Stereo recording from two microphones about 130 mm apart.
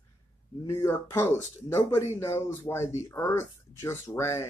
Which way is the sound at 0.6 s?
25° left (ahead or behind).